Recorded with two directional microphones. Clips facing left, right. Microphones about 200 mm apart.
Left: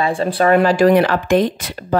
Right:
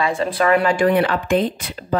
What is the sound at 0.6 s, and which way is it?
Speech, 40° left (ahead or behind).